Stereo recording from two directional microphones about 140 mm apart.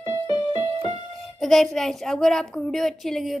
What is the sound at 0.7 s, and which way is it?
Music, 45° right (ahead or behind).